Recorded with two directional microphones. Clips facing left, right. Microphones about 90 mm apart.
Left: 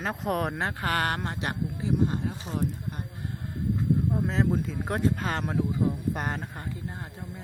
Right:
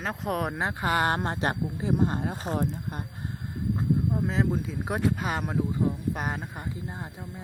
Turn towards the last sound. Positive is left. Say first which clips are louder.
# right 1 dB
turn(degrees=-15)  # may be behind; listen again after turning